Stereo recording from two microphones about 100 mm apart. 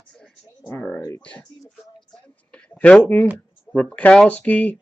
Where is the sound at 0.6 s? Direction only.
20° left (ahead or behind).